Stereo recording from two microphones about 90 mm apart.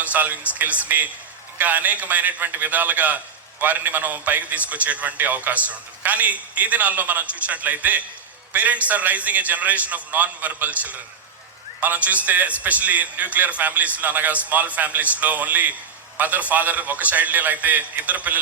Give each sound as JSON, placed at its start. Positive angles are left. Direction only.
{"t": 0.0, "sound": "a man's voice", "side_deg": -20}